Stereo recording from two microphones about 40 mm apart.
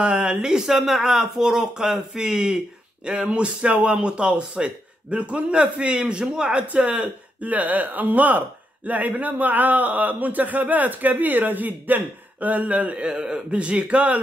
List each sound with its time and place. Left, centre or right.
0.0 s speech: right
0.7 s speech: centre; by 6.6 s right
6.7 s speech: right
13.0 s speech: centre
13.3 s speech: right